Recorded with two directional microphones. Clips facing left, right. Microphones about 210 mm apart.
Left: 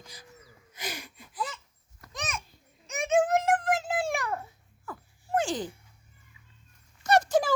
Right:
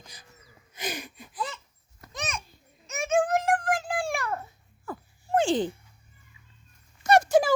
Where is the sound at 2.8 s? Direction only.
15° left (ahead or behind).